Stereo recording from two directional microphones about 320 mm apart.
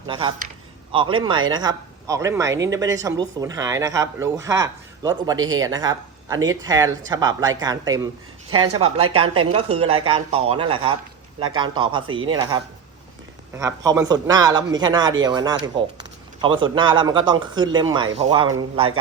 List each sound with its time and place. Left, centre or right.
0.1 s speech: centre
5.4 s speech: right
5.6 s speech: centre
8.6 s speech: right
9.8 s speech: centre